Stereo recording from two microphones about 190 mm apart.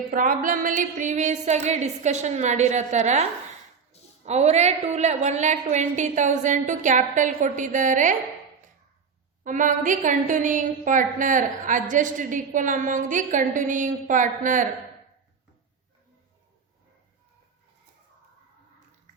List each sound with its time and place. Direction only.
0.1 s a woman's voice: 45° right (ahead or behind)
9.4 s a woman's voice: 45° right (ahead or behind)